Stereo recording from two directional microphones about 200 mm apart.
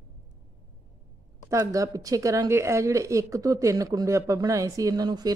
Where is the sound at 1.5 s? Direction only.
15° right (ahead or behind).